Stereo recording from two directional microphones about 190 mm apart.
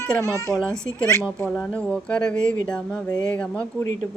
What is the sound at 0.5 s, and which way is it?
Speech, 5° left (ahead or behind).